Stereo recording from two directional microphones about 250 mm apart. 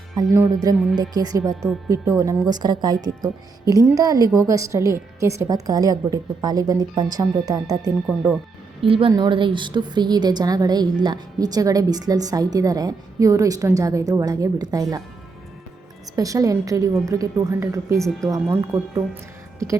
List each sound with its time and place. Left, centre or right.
0.2 s a woman's voice: centre
8.8 s a woman's voice: right
16.1 s a woman's voice: centre